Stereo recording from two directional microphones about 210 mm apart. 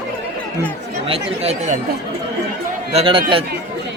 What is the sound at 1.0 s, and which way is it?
Speech, 30° right (ahead or behind).